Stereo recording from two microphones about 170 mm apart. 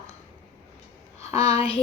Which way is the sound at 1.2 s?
35° left (ahead or behind).